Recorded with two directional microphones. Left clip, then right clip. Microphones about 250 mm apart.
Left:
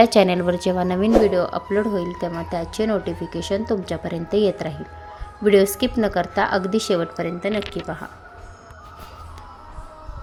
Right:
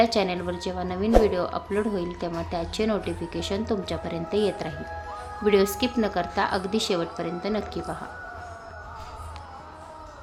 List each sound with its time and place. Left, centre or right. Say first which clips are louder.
0.0 s a woman's voice: left 8 dB; left; by 7.9 s centre